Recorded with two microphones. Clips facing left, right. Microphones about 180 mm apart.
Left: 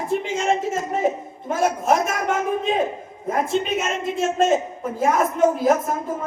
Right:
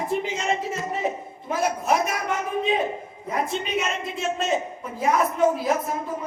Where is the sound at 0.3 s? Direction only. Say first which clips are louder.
Left 5 dB; 45° left (ahead or behind).